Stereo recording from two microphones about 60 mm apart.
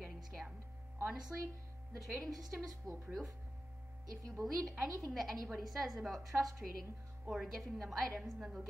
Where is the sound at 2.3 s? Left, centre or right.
Right.